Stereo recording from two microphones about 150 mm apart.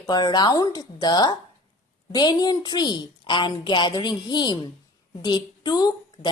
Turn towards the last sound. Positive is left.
turn(degrees=25)  # may be behind; listen again after turning